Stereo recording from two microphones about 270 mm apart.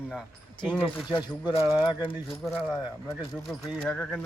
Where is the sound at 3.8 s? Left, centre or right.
Centre.